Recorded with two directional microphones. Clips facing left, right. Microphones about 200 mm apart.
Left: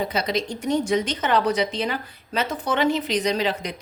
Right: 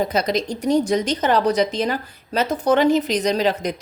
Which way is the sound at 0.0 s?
40° right (ahead or behind).